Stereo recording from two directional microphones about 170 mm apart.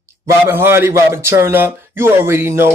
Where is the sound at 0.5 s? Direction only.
15° right (ahead or behind).